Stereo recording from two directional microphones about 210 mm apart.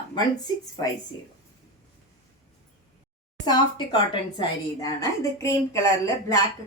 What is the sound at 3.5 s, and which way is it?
A woman's voice, 20° left (ahead or behind).